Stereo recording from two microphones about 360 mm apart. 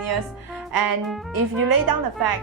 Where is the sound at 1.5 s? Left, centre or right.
Right.